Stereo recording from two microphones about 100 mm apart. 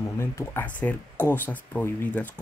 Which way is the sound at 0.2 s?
30° left (ahead or behind).